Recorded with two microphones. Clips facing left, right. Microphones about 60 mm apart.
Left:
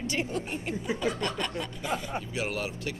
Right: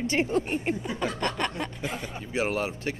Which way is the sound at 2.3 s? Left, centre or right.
Right.